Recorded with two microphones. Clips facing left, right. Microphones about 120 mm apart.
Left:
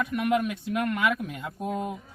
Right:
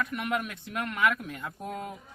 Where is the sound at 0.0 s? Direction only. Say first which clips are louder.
Left 6 dB; 15° left (ahead or behind).